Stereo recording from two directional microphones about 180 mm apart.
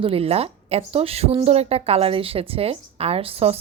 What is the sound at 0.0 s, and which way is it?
A woman's voice, 30° right (ahead or behind).